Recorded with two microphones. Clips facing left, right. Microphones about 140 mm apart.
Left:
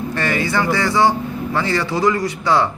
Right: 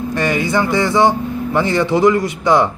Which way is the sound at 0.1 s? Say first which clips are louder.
Right 4 dB; 15° right (ahead or behind).